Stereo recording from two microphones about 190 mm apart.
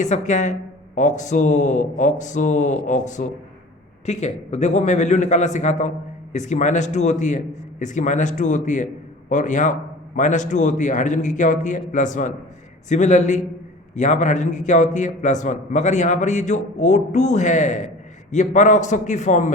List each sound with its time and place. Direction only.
0.0 s a man's voice: 40° left (ahead or behind)